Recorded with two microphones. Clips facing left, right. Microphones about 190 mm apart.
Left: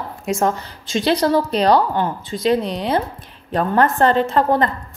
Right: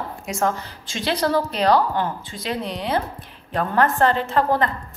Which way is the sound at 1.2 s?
25° left (ahead or behind).